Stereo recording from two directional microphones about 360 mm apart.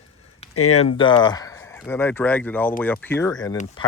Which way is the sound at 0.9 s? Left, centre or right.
Centre.